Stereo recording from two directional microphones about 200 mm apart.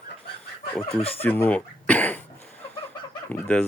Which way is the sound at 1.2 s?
10° left (ahead or behind).